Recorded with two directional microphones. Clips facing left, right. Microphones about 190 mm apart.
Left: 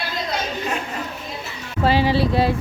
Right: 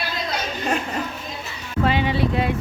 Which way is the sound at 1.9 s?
35° left (ahead or behind).